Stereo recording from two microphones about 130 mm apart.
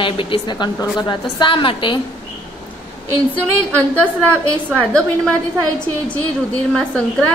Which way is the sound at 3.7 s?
10° left (ahead or behind).